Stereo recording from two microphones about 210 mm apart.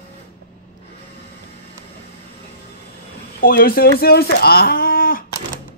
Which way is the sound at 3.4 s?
45° left (ahead or behind).